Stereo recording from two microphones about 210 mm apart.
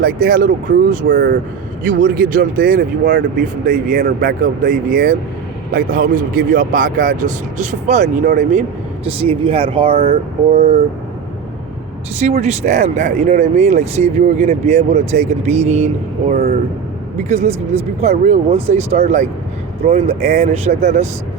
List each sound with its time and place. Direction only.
0.0 s speech: 45° right (ahead or behind)
1.0 s speech: 60° right (ahead or behind)
1.8 s speech: 40° right (ahead or behind)
3.3 s speech: 40° right (ahead or behind)
9.0 s speech: 25° right (ahead or behind)
12.2 s speech: 30° right (ahead or behind)
16.3 s speech: 45° right (ahead or behind)
17.2 s speech: 30° right (ahead or behind)